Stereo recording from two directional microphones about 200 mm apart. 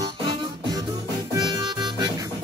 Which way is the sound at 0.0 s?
20° right (ahead or behind).